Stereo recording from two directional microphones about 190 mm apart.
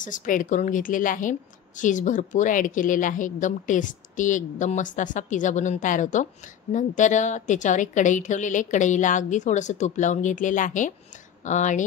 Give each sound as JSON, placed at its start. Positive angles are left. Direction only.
{"t": 0.0, "sound": "a woman's voice", "side_deg": 45}